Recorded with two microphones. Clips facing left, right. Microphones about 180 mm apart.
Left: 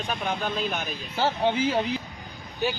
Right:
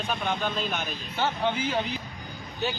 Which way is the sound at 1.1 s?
30° left (ahead or behind).